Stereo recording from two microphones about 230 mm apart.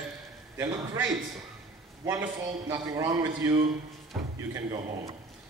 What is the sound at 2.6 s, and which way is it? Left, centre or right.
Speech, centre.